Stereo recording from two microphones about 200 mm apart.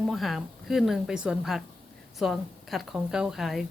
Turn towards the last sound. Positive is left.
turn(degrees=0)  # may be behind; listen again after turning